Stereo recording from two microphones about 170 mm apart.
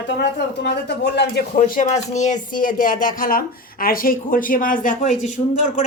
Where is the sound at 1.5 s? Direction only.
50° left (ahead or behind).